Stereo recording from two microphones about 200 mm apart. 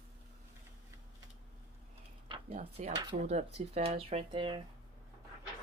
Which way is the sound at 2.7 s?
25° right (ahead or behind).